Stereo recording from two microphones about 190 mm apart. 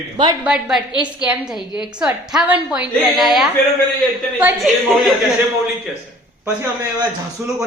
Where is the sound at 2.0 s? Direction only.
5° right (ahead or behind).